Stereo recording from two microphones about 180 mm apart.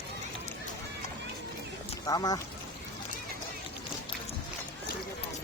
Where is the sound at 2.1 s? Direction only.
20° left (ahead or behind).